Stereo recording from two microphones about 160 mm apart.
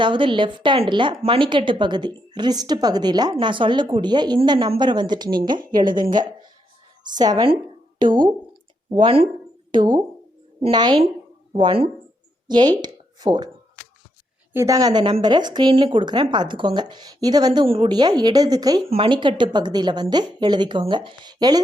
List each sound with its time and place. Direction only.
0.0 s a woman's voice: 30° right (ahead or behind)
14.5 s a woman's voice: 20° right (ahead or behind)